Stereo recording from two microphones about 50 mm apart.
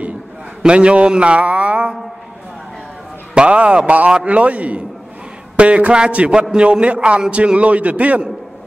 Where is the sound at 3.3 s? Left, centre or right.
Right.